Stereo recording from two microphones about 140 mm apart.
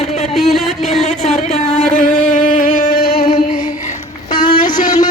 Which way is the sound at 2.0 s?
75° left (ahead or behind).